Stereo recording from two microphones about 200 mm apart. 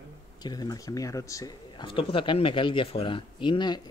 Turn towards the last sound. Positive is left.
turn(degrees=25)  # may be behind; listen again after turning